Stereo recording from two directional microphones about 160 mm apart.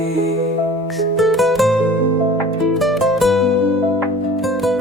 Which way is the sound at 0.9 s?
Centre (ahead or behind).